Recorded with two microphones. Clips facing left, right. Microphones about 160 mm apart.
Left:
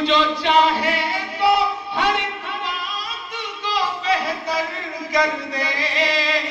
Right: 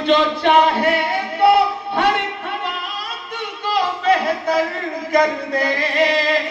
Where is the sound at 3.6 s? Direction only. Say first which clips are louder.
Right 5 dB; 55° right (ahead or behind).